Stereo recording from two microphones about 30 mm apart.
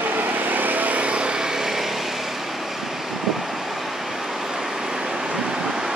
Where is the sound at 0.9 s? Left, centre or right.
Right.